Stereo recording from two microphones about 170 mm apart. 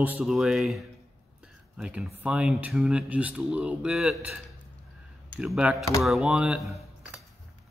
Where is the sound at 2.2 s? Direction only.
5° right (ahead or behind).